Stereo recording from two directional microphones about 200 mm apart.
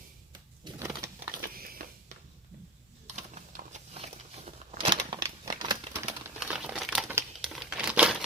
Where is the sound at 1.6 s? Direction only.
45° right (ahead or behind).